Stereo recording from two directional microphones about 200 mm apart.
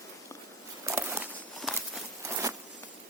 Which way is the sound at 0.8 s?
15° right (ahead or behind).